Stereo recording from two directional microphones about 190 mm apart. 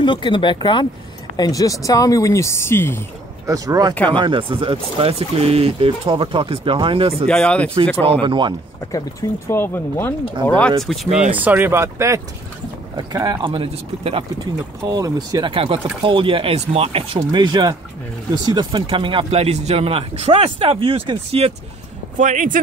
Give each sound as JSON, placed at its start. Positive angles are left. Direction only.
{"t": 0.0, "sound": "speech", "side_deg": 25}
{"t": 3.4, "sound": "speech", "side_deg": -20}
{"t": 7.2, "sound": "speech", "side_deg": 5}
{"t": 8.0, "sound": "speech", "side_deg": -30}
{"t": 9.5, "sound": "speech", "side_deg": 10}
{"t": 11.3, "sound": "speech", "side_deg": -10}
{"t": 22.1, "sound": "speech", "side_deg": -40}